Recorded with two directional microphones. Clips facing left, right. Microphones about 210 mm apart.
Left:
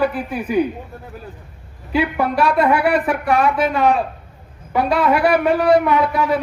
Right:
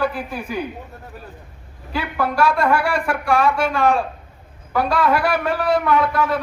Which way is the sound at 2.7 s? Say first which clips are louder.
Left 3 dB; 20° left (ahead or behind).